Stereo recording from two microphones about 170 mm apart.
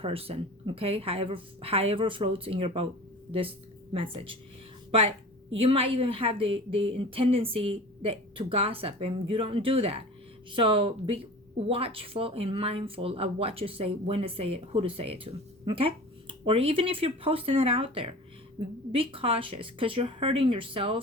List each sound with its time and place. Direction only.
0.0 s speech: 35° right (ahead or behind)
3.9 s a woman's voice: 30° right (ahead or behind)